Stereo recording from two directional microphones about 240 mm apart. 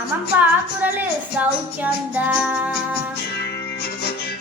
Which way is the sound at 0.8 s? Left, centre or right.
Centre.